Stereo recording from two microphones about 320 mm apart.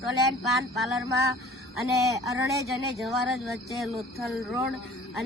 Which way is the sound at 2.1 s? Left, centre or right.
Centre.